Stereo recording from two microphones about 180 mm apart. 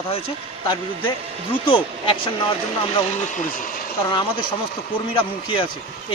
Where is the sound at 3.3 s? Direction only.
50° left (ahead or behind).